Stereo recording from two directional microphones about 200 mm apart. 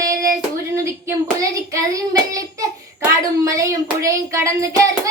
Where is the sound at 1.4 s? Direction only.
15° right (ahead or behind).